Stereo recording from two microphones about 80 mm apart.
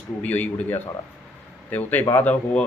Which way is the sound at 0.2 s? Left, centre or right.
Left.